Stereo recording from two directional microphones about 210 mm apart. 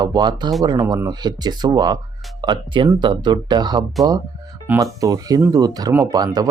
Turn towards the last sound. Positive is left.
turn(degrees=-20)  # may be behind; listen again after turning